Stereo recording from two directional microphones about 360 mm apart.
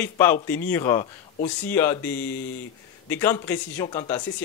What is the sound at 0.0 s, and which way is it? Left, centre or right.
A man's voice, centre.